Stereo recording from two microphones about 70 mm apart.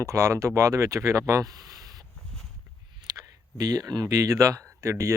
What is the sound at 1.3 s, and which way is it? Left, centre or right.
Speech, right.